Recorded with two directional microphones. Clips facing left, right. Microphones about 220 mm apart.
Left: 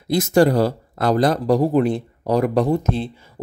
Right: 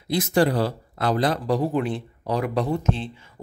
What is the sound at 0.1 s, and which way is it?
Speech, 45° left (ahead or behind).